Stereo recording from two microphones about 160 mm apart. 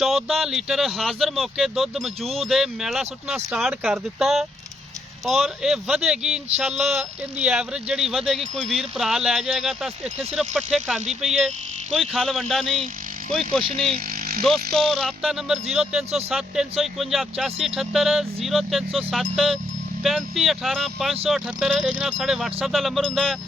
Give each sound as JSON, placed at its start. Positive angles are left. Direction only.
{"t": 0.0, "sound": "speech", "side_deg": 0}
{"t": 13.6, "sound": "speech", "side_deg": -35}
{"t": 14.4, "sound": "speech", "side_deg": 0}